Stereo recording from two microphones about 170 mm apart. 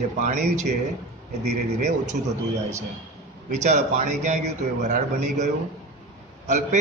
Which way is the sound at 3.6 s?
45° right (ahead or behind).